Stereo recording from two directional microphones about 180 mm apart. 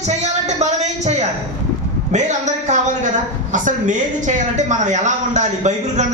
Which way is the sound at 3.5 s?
45° right (ahead or behind).